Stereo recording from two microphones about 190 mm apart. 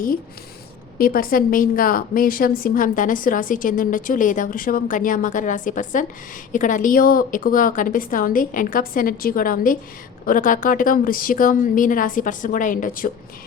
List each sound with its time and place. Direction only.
0.9 s a woman's voice: 50° left (ahead or behind)